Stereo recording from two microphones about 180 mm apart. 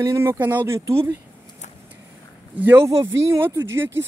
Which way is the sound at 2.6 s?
10° right (ahead or behind).